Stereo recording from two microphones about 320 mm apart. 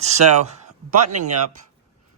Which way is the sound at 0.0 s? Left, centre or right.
Right.